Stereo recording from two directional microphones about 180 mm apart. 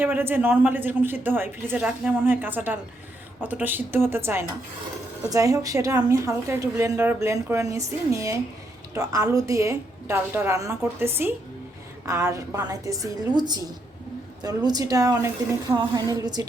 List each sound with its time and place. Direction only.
0.0 s a woman's voice: 10° right (ahead or behind)